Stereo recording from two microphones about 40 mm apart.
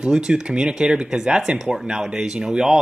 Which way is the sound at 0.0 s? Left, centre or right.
Centre.